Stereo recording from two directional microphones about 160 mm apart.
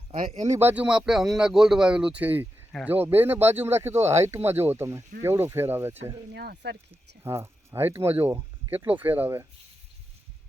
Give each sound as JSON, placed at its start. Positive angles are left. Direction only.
{"t": 0.1, "sound": "speech", "side_deg": -40}
{"t": 0.4, "sound": "speech", "side_deg": -15}
{"t": 6.3, "sound": "speech", "side_deg": -90}
{"t": 7.3, "sound": "speech", "side_deg": -15}